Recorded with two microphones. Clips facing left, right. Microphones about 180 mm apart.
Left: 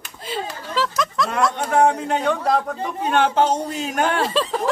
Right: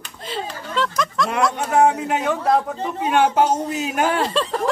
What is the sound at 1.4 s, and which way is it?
A man's voice, 5° right (ahead or behind).